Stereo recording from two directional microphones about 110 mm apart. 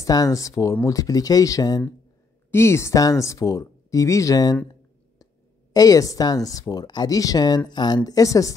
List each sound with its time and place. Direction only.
0.0 s speech: 30° left (ahead or behind)
2.5 s speech: 25° left (ahead or behind)